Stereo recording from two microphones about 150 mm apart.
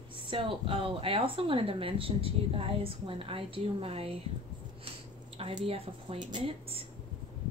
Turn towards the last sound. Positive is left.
turn(degrees=-40)  # may be behind; listen again after turning